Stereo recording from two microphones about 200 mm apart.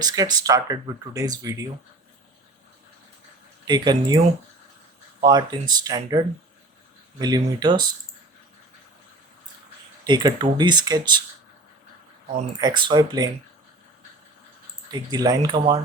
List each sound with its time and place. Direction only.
0.0 s speech: 20° right (ahead or behind)
3.7 s speech: 20° right (ahead or behind)
5.2 s speech: 20° right (ahead or behind)
10.0 s speech: 20° right (ahead or behind)
12.5 s speech: 20° right (ahead or behind)
14.8 s speech: 20° right (ahead or behind)